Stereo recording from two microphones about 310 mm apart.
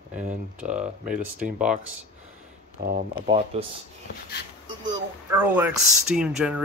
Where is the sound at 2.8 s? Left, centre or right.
Right.